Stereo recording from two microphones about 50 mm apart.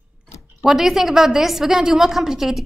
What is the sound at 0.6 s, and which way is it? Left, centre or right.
A woman's voice, centre.